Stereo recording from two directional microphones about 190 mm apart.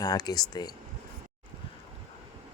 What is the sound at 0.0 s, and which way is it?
Speech, 20° left (ahead or behind).